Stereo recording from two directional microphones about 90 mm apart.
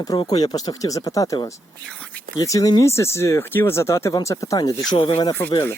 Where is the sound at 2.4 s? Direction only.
40° left (ahead or behind).